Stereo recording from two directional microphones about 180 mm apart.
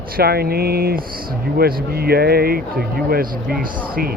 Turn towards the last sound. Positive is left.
turn(degrees=-55)  # may be behind; listen again after turning